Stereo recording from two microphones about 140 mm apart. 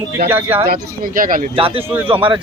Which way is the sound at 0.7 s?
80° right.